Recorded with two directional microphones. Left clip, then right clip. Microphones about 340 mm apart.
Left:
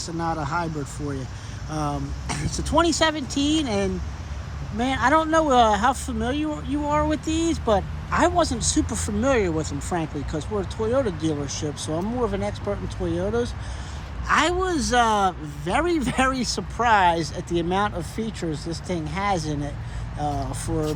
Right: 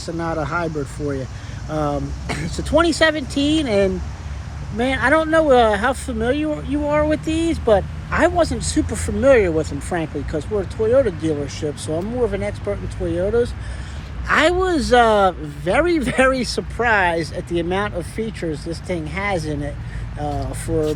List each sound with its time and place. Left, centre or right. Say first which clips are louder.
0.0 s speech: right 3 dB; centre